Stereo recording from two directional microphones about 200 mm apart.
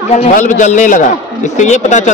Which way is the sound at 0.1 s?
35° left (ahead or behind).